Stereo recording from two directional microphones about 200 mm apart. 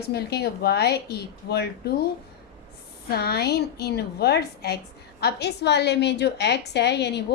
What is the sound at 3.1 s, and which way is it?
A woman's voice, 50° left (ahead or behind).